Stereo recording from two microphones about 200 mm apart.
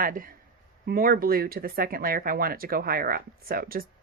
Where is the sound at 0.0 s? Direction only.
45° right (ahead or behind).